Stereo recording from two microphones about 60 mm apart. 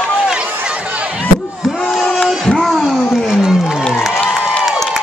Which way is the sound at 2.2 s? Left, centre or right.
Centre.